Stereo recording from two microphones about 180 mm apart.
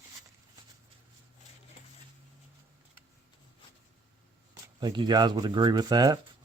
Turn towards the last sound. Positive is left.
turn(degrees=-20)  # may be behind; listen again after turning